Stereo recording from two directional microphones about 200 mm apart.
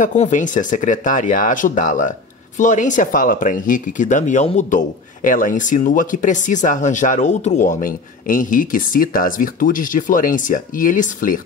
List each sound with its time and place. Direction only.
0.0 s speech: 40° left (ahead or behind)